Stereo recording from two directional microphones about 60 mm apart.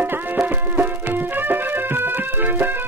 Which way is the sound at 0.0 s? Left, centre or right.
Right.